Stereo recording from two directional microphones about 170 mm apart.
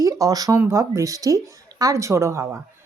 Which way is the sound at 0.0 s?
20° right (ahead or behind).